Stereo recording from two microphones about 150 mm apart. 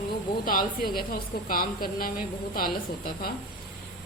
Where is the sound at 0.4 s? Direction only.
75° left (ahead or behind).